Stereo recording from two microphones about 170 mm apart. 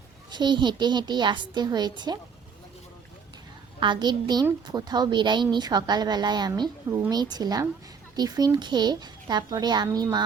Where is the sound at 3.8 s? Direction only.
25° right (ahead or behind).